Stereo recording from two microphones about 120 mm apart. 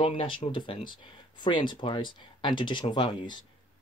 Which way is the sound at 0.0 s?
50° left (ahead or behind).